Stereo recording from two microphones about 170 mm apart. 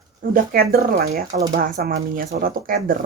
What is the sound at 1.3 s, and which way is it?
Speech, 55° right (ahead or behind).